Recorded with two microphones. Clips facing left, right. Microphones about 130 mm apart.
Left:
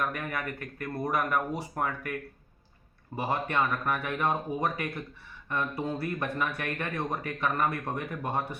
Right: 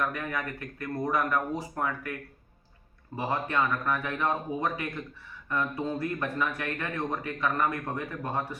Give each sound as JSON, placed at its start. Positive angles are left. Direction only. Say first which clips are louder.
{"t": 0.0, "sound": "speech", "louder": "right 1 dB", "side_deg": 10}
{"t": 3.2, "sound": "speech", "louder": "even", "side_deg": 15}